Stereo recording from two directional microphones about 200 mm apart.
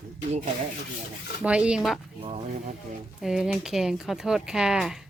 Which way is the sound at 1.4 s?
5° right (ahead or behind).